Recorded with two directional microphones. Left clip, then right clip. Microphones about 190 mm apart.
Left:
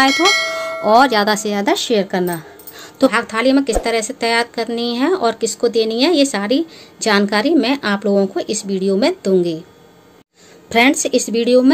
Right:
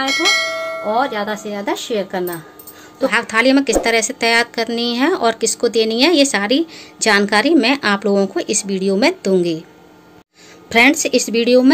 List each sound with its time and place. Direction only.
0.0 s bell: centre (ahead or behind)
0.8 s speech: 55° left (ahead or behind)
3.1 s speech: 5° left (ahead or behind)
10.7 s speech: 5° left (ahead or behind)